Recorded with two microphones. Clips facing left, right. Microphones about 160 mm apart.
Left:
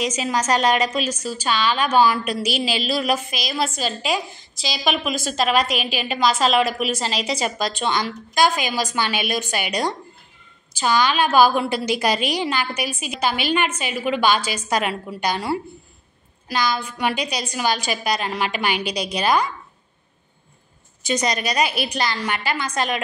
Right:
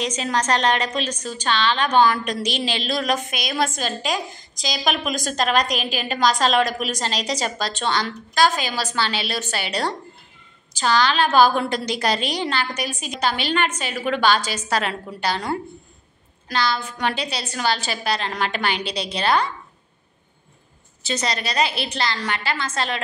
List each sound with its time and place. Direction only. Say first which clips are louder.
0.0 s a woman's voice: left 1 dB; 10° left (ahead or behind)
5.8 s a woman's voice: left 1 dB; 40° right (ahead or behind)
6.0 s a woman's voice: even; 5° left (ahead or behind)
21.0 s a woman's voice: left 3 dB; 15° left (ahead or behind)